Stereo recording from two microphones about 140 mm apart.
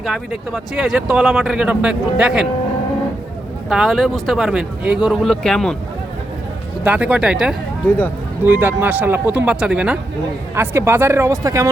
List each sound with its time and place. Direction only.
0.0 s speech: 5° right (ahead or behind)
3.7 s speech: centre (ahead or behind)
6.8 s speech: 10° right (ahead or behind)
7.9 s speech: 10° left (ahead or behind)
8.4 s speech: 15° right (ahead or behind)
10.5 s speech: 20° right (ahead or behind)